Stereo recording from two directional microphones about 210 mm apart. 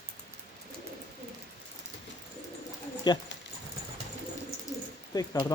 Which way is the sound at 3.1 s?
20° left (ahead or behind).